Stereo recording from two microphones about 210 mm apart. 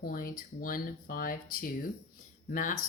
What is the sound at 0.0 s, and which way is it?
Speech, 45° left (ahead or behind).